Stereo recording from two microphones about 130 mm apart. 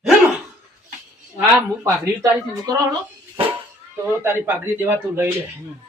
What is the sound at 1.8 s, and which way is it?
Speech, 25° right (ahead or behind).